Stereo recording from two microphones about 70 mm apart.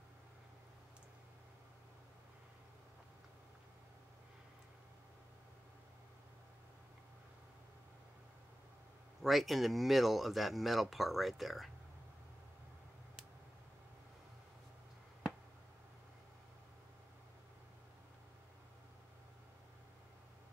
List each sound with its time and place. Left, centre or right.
9.2 s speech: centre